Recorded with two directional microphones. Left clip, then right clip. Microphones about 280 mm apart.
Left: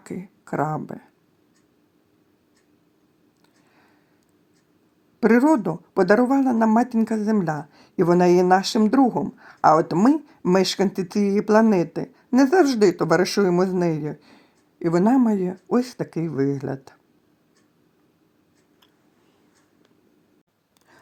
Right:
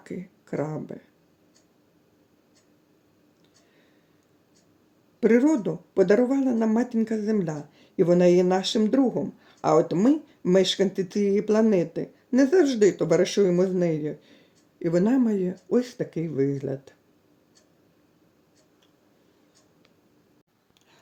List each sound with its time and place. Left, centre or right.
0.0 s speech: left
5.2 s speech: left